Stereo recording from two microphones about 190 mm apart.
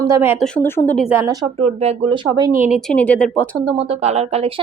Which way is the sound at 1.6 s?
30° right (ahead or behind).